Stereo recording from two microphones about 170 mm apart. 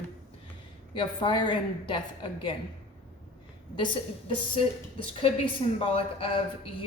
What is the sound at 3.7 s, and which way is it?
A woman's voice, 30° left (ahead or behind).